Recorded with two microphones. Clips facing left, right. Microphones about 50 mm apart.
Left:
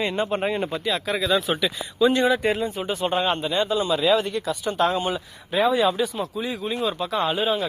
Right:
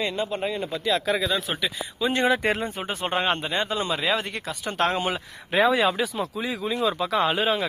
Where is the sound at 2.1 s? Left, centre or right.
Right.